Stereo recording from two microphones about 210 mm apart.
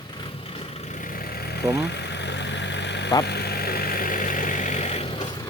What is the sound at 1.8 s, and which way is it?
Vehicle, 55° left (ahead or behind).